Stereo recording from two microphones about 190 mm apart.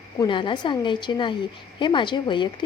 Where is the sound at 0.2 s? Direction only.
25° left (ahead or behind).